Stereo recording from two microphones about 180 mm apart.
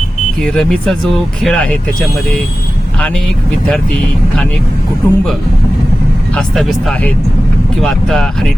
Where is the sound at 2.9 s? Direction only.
5° left (ahead or behind).